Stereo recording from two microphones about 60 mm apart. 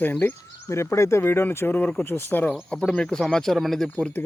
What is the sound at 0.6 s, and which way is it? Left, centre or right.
Speech, left.